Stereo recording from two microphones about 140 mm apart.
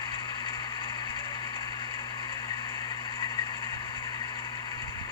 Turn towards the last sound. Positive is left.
turn(degrees=35)  # may be behind; listen again after turning